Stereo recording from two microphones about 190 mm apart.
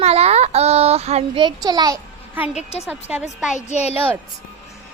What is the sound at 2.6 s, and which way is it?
Speech, 35° left (ahead or behind).